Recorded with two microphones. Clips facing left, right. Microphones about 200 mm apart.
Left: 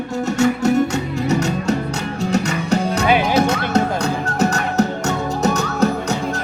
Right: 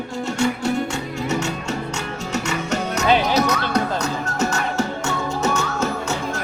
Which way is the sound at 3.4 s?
25° left (ahead or behind).